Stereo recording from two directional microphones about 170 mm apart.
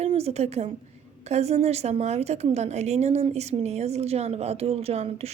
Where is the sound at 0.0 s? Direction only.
40° right (ahead or behind).